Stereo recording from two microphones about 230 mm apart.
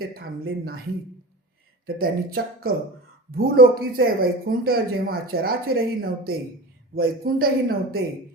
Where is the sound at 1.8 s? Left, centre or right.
Right.